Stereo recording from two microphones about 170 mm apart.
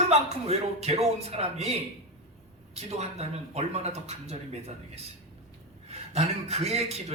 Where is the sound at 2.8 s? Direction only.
40° right (ahead or behind).